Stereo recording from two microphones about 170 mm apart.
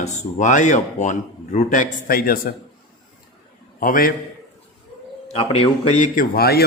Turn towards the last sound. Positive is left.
turn(degrees=65)  # may be behind; listen again after turning